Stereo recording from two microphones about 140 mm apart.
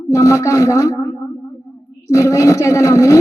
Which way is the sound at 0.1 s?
20° left (ahead or behind).